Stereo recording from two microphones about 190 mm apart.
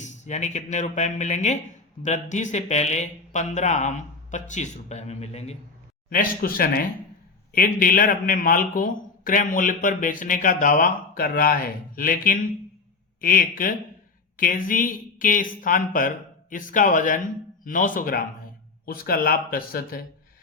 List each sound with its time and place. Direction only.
0.0 s speech: 40° left (ahead or behind)
6.1 s a man's voice: 50° left (ahead or behind)